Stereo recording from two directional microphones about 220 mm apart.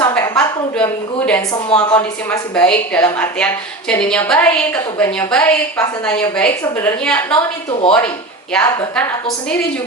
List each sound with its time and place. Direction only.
0.0 s a woman's voice: 10° left (ahead or behind)
7.3 s speech: 25° left (ahead or behind)
8.5 s a woman's voice: centre (ahead or behind)